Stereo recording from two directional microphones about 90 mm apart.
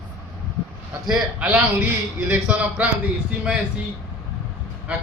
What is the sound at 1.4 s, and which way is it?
A man's voice, 15° right (ahead or behind).